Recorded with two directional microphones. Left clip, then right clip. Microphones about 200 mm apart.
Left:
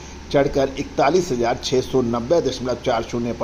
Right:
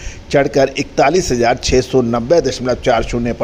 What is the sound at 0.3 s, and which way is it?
Speech, 45° right (ahead or behind).